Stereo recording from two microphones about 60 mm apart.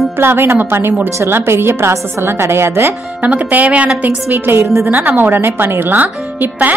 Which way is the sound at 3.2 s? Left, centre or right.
Right.